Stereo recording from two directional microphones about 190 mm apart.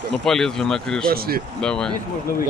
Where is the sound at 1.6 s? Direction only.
5° left (ahead or behind).